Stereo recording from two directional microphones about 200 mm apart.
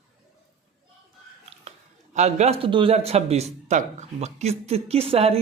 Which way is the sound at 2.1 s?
35° right (ahead or behind).